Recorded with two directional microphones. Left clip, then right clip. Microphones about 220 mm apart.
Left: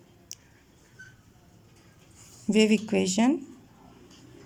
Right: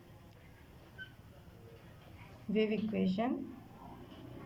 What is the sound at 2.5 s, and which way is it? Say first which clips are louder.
Speech: left 10 dB; 45° left (ahead or behind).